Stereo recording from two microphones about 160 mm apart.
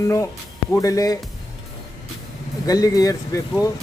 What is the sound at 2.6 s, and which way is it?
Speech, 25° left (ahead or behind).